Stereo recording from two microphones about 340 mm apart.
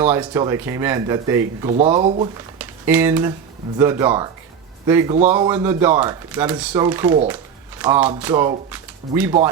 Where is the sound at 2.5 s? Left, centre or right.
Centre.